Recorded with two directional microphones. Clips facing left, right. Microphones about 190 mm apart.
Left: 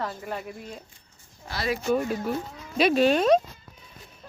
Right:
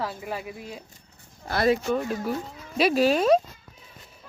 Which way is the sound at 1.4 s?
50° right (ahead or behind).